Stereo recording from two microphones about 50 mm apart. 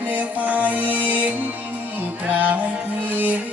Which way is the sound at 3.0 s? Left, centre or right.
Right.